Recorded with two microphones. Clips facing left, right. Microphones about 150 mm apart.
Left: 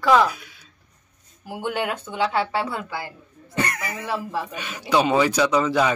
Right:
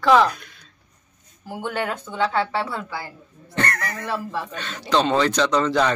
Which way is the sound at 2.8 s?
20° left (ahead or behind).